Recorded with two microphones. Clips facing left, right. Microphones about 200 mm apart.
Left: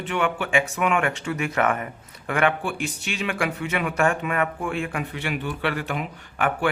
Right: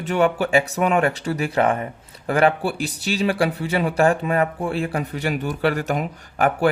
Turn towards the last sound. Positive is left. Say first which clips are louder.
# right 5 dB
turn(degrees=-40)  # may be behind; listen again after turning